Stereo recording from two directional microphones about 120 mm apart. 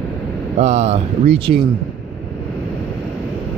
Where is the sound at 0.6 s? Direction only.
70° right (ahead or behind).